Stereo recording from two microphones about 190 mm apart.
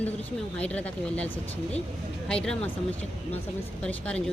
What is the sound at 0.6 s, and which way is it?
Speech, 5° left (ahead or behind).